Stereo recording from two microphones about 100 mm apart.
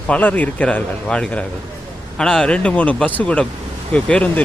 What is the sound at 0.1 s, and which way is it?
Speech, 15° left (ahead or behind).